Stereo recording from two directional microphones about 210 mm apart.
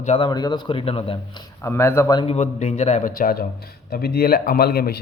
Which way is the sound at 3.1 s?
45° left (ahead or behind).